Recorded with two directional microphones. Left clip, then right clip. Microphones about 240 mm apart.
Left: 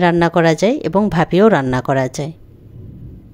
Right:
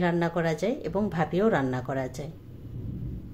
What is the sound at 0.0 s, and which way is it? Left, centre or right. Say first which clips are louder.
A woman's voice: left 14 dB; left.